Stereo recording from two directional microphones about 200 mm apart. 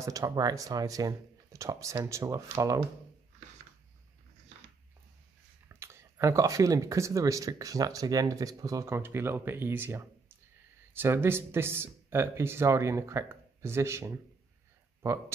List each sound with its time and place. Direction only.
0.0 s speech: 15° right (ahead or behind)
5.7 s speech: 15° right (ahead or behind)